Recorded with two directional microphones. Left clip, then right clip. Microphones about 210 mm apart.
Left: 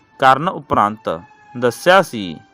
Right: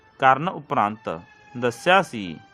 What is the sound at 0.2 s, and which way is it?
A man's voice, 25° left (ahead or behind).